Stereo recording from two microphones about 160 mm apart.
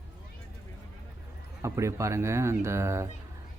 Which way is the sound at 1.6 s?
20° right (ahead or behind).